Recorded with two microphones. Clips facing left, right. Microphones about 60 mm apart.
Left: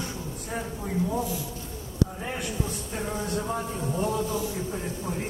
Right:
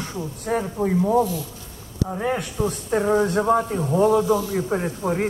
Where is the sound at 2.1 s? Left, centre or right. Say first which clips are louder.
Right 8 dB; right.